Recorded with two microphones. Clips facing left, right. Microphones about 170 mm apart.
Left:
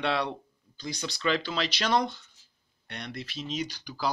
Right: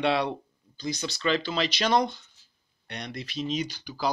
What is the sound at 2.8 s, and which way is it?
Speech, 15° right (ahead or behind).